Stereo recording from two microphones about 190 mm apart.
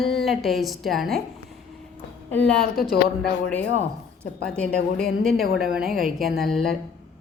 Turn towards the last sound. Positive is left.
turn(degrees=0)  # may be behind; listen again after turning